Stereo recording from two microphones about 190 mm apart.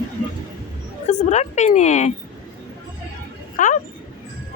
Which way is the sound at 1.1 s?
35° left (ahead or behind).